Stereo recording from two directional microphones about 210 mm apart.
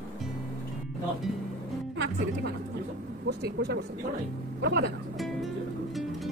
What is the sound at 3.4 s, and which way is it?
Speech, 55° right (ahead or behind).